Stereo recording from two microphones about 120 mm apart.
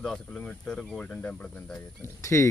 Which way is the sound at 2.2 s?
25° left (ahead or behind).